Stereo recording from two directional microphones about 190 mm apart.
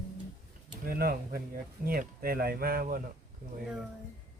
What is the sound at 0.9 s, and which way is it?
Speech, 50° right (ahead or behind).